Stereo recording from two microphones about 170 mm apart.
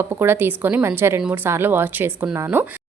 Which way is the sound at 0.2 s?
15° right (ahead or behind).